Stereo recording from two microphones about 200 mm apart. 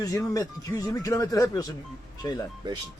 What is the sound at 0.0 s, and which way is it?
A man's voice, 15° left (ahead or behind).